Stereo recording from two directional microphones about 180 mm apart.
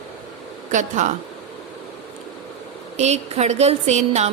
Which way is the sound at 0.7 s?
45° right (ahead or behind).